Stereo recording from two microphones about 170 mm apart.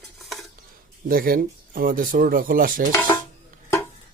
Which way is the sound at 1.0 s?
60° right (ahead or behind).